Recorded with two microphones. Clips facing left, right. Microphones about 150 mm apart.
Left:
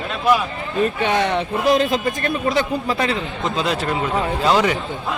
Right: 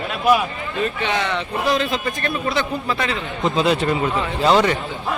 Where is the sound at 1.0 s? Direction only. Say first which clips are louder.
Left 3 dB; 50° left (ahead or behind).